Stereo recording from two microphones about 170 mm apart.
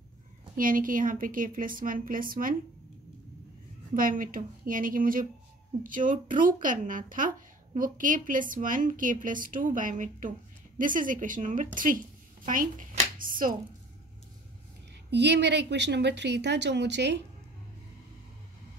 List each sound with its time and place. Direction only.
0.6 s a woman's voice: 55° right (ahead or behind)
3.9 s speech: 55° right (ahead or behind)
15.0 s a woman's voice: 90° right